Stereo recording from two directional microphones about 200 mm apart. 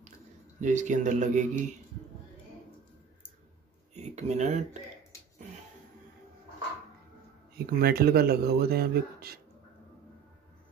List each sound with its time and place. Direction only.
0.6 s speech: 40° right (ahead or behind)
3.9 s a sound: 35° right (ahead or behind)
7.5 s speech: 50° right (ahead or behind)